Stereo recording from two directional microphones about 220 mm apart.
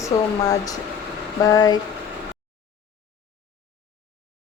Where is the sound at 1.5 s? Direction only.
15° left (ahead or behind).